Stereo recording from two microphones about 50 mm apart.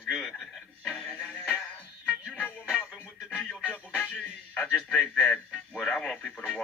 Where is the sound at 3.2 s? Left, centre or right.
Left.